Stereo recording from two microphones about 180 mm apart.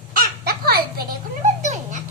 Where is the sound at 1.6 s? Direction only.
40° right (ahead or behind).